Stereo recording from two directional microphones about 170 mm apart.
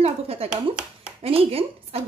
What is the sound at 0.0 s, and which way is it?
A woman's voice, 35° right (ahead or behind).